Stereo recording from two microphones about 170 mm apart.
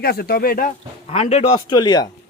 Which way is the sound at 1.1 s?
40° left (ahead or behind).